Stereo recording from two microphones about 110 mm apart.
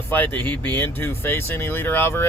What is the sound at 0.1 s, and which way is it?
Speech, 15° left (ahead or behind).